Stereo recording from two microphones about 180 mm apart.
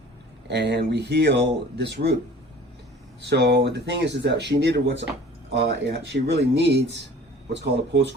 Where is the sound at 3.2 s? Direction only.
70° right (ahead or behind).